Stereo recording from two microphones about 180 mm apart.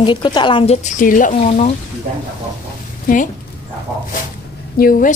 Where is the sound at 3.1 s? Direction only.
55° left (ahead or behind).